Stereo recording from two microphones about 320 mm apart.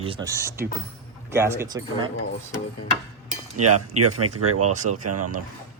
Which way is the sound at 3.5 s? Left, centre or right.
Right.